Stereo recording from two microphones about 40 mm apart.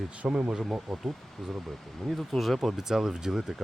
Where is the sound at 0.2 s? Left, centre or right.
Centre.